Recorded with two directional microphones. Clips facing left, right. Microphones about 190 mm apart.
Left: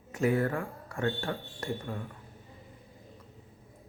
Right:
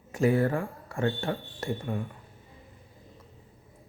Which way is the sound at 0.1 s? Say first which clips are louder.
Right 3 dB; 30° right (ahead or behind).